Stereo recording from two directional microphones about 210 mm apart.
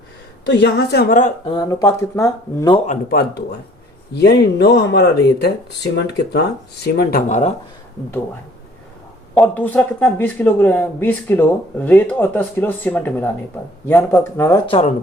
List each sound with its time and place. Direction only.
0.4 s speech: 55° left (ahead or behind)
1.5 s speech: 20° left (ahead or behind)
2.7 s speech: 35° left (ahead or behind)
9.3 s speech: 5° left (ahead or behind)